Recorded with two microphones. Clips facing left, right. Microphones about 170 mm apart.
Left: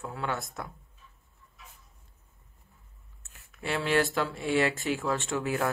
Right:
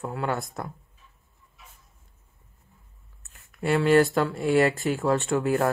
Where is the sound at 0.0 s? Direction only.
50° right (ahead or behind).